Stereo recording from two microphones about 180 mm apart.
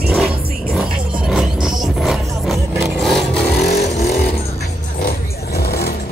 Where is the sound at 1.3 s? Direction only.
Centre (ahead or behind).